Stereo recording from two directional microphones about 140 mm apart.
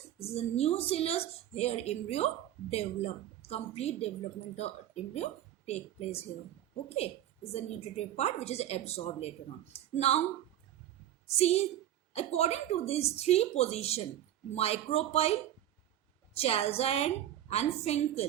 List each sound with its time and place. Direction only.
0.2 s a woman's voice: 45° left (ahead or behind)
11.3 s a woman's voice: 50° left (ahead or behind)